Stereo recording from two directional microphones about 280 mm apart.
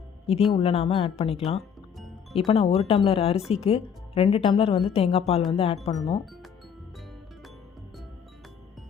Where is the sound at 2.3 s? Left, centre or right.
Left.